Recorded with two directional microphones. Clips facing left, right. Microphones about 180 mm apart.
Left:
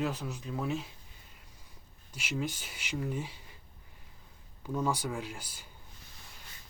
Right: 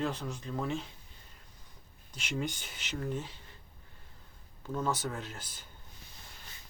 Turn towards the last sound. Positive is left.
turn(degrees=10)  # may be behind; listen again after turning